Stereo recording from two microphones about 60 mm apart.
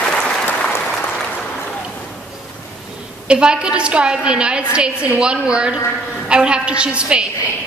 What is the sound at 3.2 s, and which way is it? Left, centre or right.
A woman's voice, centre.